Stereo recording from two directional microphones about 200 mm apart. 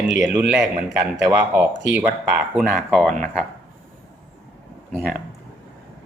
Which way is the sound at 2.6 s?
Centre (ahead or behind).